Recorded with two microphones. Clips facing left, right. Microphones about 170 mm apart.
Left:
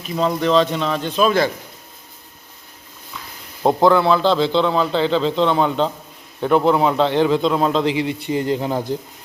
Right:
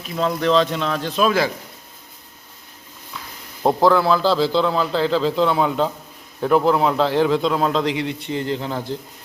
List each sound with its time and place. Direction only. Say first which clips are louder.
0.2 s a man's voice: left 1 dB; centre (ahead or behind)
3.6 s a man's voice: left 2 dB; centre (ahead or behind); by 9.0 s 15° left (ahead or behind)